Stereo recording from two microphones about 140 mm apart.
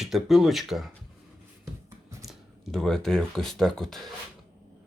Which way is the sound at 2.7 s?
5° left (ahead or behind).